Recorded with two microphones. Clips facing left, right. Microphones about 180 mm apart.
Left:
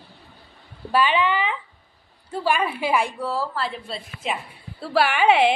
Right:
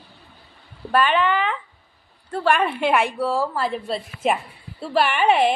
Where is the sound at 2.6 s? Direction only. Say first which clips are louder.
Right 3 dB; 5° left (ahead or behind).